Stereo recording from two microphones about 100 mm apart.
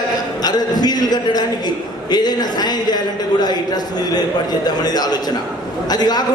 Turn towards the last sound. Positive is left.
turn(degrees=40)  # may be behind; listen again after turning